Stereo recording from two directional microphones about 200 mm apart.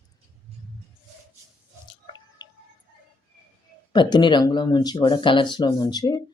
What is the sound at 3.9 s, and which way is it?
Speech, 20° left (ahead or behind).